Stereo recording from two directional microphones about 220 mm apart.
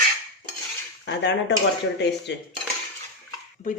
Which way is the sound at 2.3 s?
55° left (ahead or behind).